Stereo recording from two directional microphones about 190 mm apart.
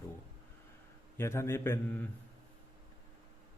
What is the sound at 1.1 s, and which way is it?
Speech, 15° left (ahead or behind).